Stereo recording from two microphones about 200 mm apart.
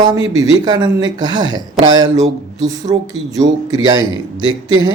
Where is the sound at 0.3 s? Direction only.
20° right (ahead or behind).